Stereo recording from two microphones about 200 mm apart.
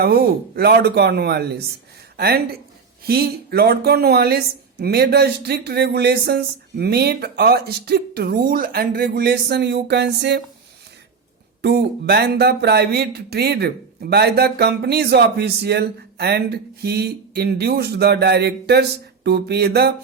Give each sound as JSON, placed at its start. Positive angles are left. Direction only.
{"t": 0.0, "sound": "speech", "side_deg": -50}
{"t": 11.6, "sound": "speech", "side_deg": -55}